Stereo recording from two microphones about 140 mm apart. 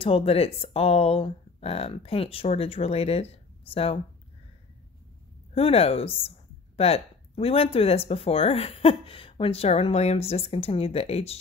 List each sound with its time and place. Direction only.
0.0 s speech: 45° left (ahead or behind)
5.5 s speech: 45° left (ahead or behind)